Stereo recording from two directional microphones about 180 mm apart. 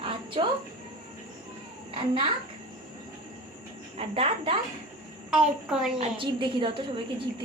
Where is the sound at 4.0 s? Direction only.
30° right (ahead or behind).